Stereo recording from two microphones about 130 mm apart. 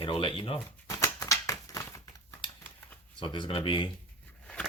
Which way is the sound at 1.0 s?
25° left (ahead or behind).